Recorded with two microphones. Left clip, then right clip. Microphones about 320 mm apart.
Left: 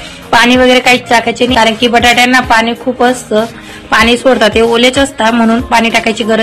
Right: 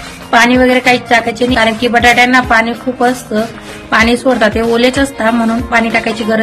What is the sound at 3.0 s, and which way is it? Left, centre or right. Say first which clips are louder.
A woman's voice: left 3 dB; centre.